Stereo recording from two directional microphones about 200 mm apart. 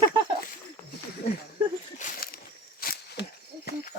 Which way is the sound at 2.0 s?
45° left (ahead or behind).